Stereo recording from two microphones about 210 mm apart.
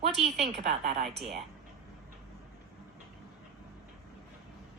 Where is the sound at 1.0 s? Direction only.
Centre (ahead or behind).